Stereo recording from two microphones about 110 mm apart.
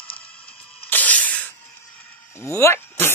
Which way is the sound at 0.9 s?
15° left (ahead or behind).